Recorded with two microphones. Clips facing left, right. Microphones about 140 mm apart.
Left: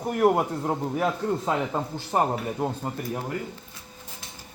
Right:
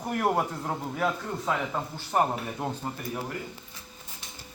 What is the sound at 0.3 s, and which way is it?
A man's voice, 20° left (ahead or behind).